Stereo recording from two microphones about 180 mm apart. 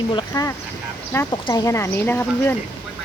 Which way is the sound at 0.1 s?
25° left (ahead or behind).